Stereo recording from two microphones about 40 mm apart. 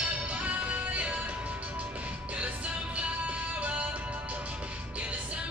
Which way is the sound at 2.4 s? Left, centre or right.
Right.